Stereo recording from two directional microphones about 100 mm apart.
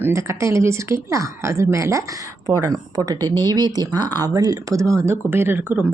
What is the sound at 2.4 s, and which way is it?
Speech, 40° right (ahead or behind).